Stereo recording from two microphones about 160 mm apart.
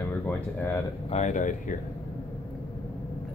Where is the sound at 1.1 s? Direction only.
45° left (ahead or behind).